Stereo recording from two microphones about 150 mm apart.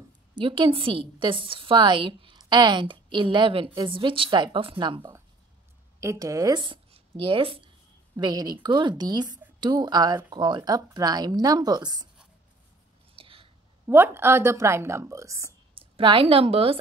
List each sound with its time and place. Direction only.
0.4 s a woman's voice: 35° right (ahead or behind)
5.9 s speech: 20° right (ahead or behind)
13.1 s a sound: 35° right (ahead or behind)
13.8 s a woman's voice: 15° right (ahead or behind)
15.7 s a woman's voice: 35° right (ahead or behind)